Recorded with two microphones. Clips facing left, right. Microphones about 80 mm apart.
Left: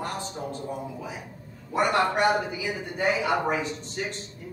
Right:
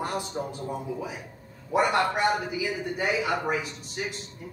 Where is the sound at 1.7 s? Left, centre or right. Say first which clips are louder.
Even; centre.